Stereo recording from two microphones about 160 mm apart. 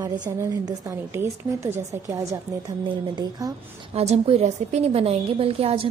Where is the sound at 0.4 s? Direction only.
20° right (ahead or behind).